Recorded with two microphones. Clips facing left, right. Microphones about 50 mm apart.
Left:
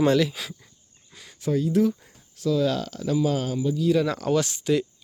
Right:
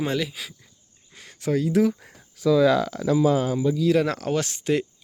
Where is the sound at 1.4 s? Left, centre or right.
Right.